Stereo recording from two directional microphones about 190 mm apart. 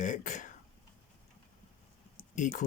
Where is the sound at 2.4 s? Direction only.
40° left (ahead or behind).